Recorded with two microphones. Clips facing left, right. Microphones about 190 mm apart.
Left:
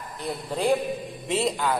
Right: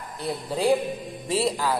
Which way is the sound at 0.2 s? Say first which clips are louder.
Right 2 dB; 10° right (ahead or behind).